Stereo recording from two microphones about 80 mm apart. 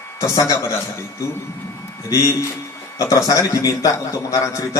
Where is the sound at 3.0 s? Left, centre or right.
Left.